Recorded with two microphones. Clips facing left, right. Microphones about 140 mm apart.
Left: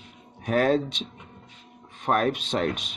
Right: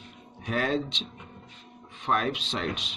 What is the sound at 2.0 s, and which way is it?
Speech, 50° left (ahead or behind).